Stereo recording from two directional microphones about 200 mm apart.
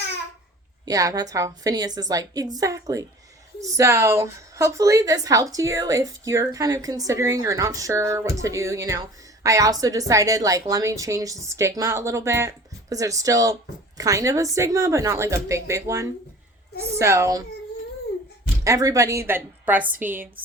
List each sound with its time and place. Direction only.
0.9 s a woman's voice: 15° right (ahead or behind)
18.6 s a woman's voice: 15° right (ahead or behind)